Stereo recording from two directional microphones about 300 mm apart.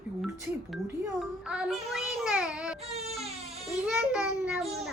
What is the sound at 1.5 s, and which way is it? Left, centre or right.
Child singing, centre.